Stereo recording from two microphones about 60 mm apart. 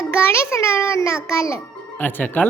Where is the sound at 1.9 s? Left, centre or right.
Left.